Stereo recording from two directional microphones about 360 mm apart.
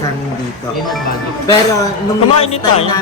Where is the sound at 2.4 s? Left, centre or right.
Centre.